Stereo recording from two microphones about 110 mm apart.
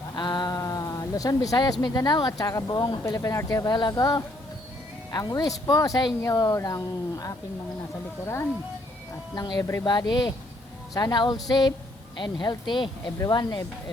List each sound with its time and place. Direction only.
0.2 s a sound: 40° left (ahead or behind)
1.8 s speech: 35° left (ahead or behind)
3.0 s speech: 30° left (ahead or behind)
9.3 s speech: 40° left (ahead or behind)